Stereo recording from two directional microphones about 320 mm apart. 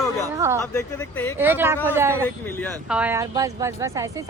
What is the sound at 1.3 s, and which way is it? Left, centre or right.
Speech, centre.